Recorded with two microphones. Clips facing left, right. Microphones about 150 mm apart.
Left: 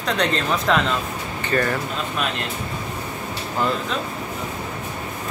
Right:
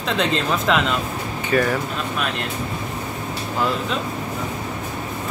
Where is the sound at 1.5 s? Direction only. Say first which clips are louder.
Right 2 dB; 5° right (ahead or behind).